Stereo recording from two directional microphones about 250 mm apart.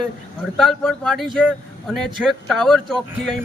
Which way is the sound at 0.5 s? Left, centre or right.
Centre.